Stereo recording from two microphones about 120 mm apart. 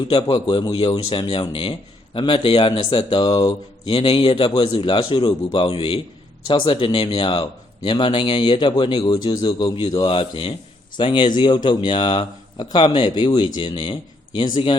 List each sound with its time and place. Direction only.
0.1 s a man's voice: 40° left (ahead or behind)
4.0 s a man's voice: 50° left (ahead or behind)